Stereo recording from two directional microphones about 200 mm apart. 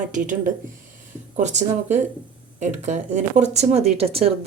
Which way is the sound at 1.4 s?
35° right (ahead or behind).